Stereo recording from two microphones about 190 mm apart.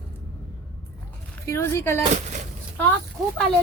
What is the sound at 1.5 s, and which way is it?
Speech, 15° left (ahead or behind).